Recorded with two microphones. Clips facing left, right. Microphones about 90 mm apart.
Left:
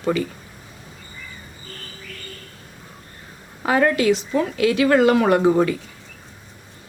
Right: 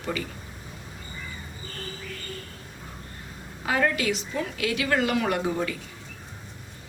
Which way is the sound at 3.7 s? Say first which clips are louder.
Left 7 dB; 40° left (ahead or behind).